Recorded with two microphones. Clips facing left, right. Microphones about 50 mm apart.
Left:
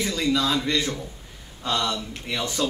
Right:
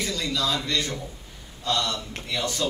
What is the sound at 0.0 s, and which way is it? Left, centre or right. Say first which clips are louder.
A man's voice: left 4 dB; left.